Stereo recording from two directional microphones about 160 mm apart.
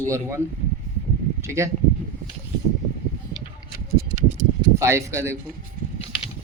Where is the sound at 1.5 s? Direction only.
15° right (ahead or behind).